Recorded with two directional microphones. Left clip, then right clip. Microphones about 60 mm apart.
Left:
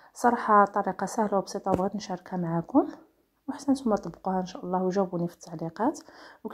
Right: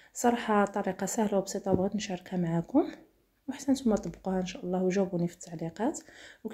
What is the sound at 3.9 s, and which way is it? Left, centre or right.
Speech, left.